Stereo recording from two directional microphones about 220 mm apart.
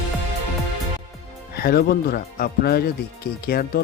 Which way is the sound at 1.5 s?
45° left (ahead or behind).